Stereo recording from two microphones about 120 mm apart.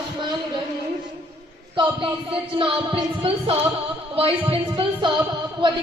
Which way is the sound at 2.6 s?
45° right (ahead or behind).